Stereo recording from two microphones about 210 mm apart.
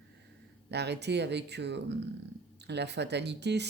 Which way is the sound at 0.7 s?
55° right (ahead or behind).